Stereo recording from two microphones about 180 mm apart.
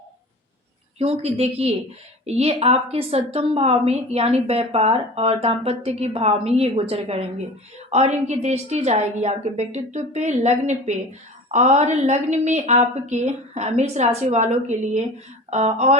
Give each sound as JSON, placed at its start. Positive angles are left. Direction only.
{"t": 0.9, "sound": "a woman's voice", "side_deg": -30}